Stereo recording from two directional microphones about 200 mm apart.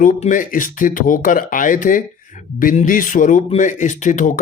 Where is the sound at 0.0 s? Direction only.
40° left (ahead or behind).